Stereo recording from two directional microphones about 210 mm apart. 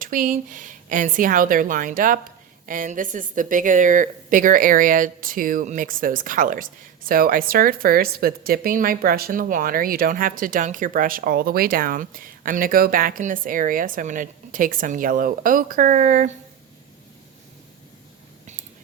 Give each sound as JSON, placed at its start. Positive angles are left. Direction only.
{"t": 0.0, "sound": "speech", "side_deg": -40}